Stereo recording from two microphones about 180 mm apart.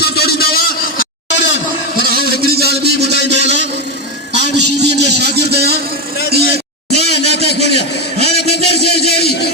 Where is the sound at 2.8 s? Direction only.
65° right (ahead or behind).